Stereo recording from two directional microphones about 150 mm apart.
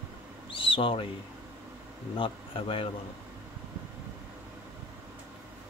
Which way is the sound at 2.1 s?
35° left (ahead or behind).